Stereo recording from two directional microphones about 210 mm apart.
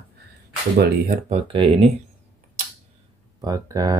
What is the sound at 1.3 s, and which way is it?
Speech, 25° right (ahead or behind).